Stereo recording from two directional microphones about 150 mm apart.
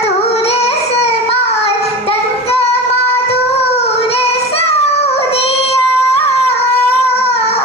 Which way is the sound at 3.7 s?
45° left (ahead or behind).